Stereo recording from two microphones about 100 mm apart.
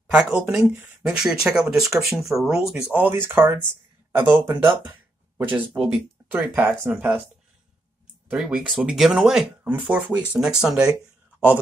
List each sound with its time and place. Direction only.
0.1 s speech: 20° right (ahead or behind)
0.4 s speech: 10° right (ahead or behind)
3.0 s speech: 20° right (ahead or behind)
5.5 s speech: 10° right (ahead or behind)
8.4 s speech: 5° right (ahead or behind)
9.6 s speech: 15° right (ahead or behind)